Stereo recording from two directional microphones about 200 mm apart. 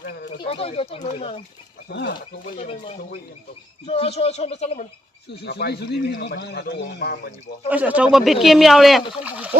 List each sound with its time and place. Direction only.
0.4 s speech: 30° left (ahead or behind)
1.9 s a man's voice: 60° left (ahead or behind)
2.6 s speech: 30° left (ahead or behind)
5.4 s a man's voice: 55° left (ahead or behind)
7.7 s speech: 5° right (ahead or behind)